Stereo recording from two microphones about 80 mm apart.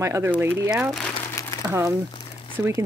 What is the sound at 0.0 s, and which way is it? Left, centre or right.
Speech, right.